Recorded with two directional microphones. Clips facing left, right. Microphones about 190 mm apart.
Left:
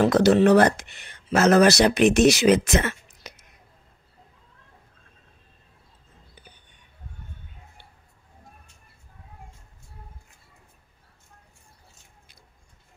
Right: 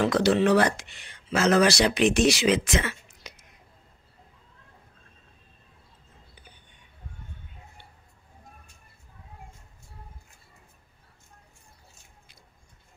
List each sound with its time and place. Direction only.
0.0 s speech: 45° left (ahead or behind)